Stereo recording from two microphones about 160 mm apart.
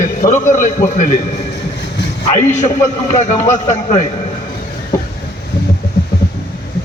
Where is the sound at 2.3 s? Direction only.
50° left (ahead or behind).